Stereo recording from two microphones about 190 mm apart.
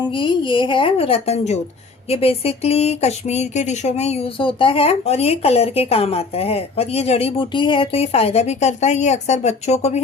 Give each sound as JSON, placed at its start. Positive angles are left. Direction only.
{"t": 0.2, "sound": "a woman's voice", "side_deg": 25}